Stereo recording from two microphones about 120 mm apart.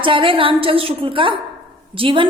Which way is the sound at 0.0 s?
45° right (ahead or behind).